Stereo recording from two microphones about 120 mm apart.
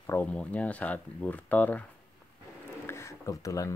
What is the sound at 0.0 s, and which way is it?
Speech, 15° left (ahead or behind).